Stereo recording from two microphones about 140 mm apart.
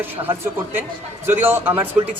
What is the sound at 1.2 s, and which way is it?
Speech, 15° right (ahead or behind).